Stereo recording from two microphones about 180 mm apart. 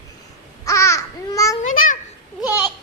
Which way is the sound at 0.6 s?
15° left (ahead or behind).